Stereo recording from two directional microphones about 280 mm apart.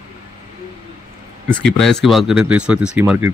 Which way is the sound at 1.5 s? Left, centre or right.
Centre.